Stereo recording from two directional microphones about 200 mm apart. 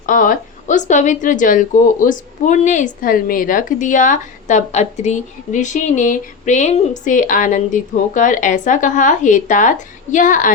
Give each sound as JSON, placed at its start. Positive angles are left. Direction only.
{"t": 0.0, "sound": "a woman's voice", "side_deg": 40}